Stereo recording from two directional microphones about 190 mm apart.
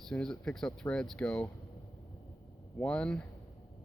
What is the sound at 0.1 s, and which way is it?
Speech, 5° left (ahead or behind).